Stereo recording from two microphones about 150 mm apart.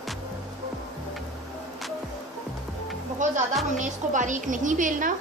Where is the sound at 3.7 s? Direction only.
55° right (ahead or behind).